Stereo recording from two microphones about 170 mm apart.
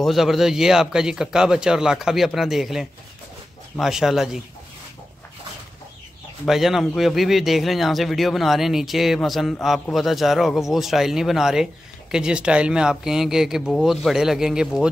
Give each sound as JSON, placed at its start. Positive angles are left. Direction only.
{"t": 0.0, "sound": "speech", "side_deg": 0}
{"t": 6.4, "sound": "speech", "side_deg": 0}